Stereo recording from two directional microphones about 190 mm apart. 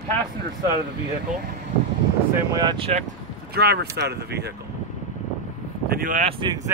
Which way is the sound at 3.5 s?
55° right (ahead or behind).